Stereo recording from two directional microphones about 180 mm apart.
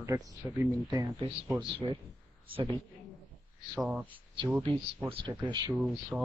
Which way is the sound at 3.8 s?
5° right (ahead or behind).